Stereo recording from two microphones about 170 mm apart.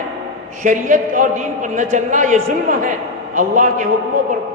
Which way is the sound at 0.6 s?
50° right (ahead or behind).